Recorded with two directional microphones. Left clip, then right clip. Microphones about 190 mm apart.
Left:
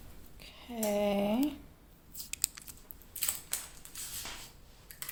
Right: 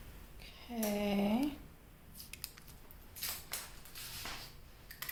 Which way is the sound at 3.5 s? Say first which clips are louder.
Left 3 dB; 50° left (ahead or behind).